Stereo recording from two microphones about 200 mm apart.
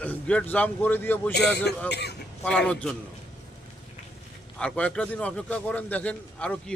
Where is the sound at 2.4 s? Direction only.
5° left (ahead or behind).